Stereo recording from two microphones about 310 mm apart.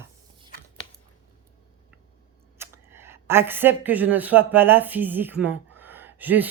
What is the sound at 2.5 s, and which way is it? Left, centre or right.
Speech, centre.